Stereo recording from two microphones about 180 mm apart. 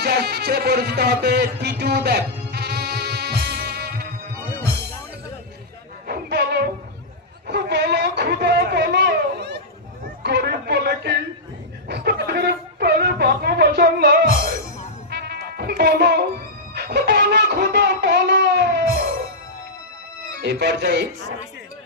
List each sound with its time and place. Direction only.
0.0 s music: 65° right (ahead or behind)
6.1 s music: 65° right (ahead or behind)
7.4 s a sound: 65° right (ahead or behind)
10.0 s chatter: 65° right (ahead or behind)
11.9 s a sound: 65° right (ahead or behind)
15.1 s music: 65° right (ahead or behind)
20.4 s a man's voice: 70° right (ahead or behind)